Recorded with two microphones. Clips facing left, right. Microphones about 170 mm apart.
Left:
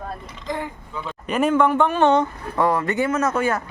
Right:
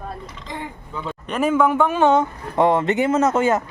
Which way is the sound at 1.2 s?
Centre (ahead or behind).